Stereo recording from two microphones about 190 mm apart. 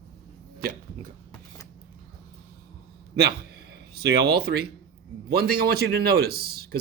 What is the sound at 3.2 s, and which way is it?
Speech, 60° right (ahead or behind).